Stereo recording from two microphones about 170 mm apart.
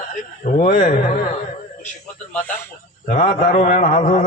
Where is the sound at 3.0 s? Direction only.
50° left (ahead or behind).